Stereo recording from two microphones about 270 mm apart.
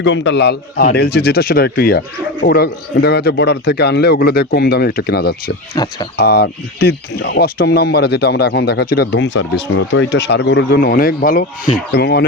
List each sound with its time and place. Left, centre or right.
0.0 s speech: left
5.7 s speech: centre
6.1 s speech: left